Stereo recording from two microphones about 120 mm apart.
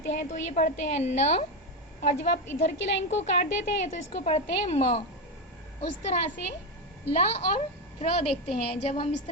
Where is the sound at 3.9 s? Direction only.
65° left (ahead or behind).